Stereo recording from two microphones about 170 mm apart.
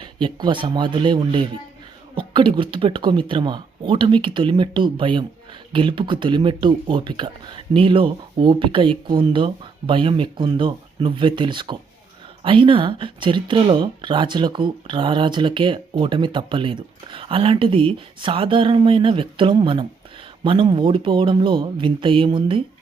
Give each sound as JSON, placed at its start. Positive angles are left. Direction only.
{"t": 0.0, "sound": "speech", "side_deg": -30}